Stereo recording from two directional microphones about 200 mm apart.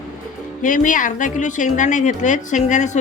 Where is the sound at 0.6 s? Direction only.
40° left (ahead or behind).